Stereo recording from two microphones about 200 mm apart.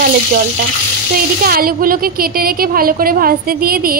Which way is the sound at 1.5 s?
45° right (ahead or behind).